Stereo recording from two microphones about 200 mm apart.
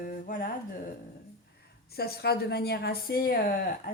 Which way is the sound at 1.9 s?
50° left (ahead or behind).